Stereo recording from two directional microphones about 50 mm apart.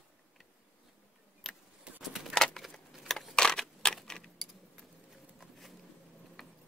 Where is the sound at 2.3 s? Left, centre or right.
Centre.